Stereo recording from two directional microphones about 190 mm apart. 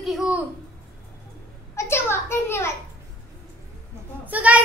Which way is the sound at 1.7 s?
15° left (ahead or behind).